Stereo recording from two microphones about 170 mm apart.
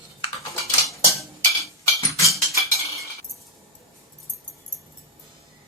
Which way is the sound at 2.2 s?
20° left (ahead or behind).